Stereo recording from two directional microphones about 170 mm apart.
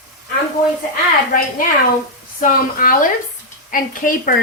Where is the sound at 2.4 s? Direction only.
55° left (ahead or behind).